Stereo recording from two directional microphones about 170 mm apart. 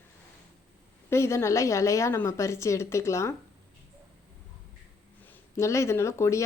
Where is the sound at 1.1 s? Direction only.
15° left (ahead or behind).